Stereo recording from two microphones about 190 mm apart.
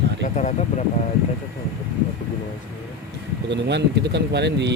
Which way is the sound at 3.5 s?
65° right (ahead or behind).